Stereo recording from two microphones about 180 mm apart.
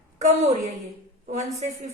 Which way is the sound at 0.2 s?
40° right (ahead or behind).